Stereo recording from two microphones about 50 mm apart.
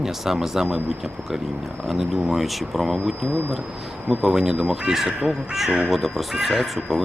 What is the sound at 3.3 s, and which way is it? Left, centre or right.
Speech, right.